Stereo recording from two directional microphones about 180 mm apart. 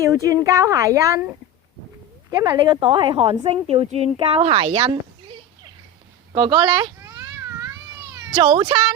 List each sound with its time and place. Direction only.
0.0 s a woman's voice: 15° right (ahead or behind); by 4.9 s 35° right (ahead or behind)
6.3 s speech: 25° right (ahead or behind)
7.0 s baby cry: 15° right (ahead or behind)
8.3 s speech: 30° right (ahead or behind)